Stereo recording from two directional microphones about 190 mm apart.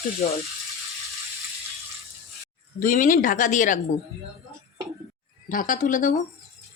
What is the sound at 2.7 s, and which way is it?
Speech, 45° left (ahead or behind).